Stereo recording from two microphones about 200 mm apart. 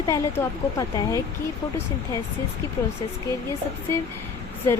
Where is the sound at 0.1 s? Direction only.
20° left (ahead or behind).